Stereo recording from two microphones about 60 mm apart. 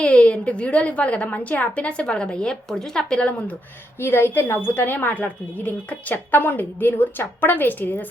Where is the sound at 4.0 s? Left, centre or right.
Left.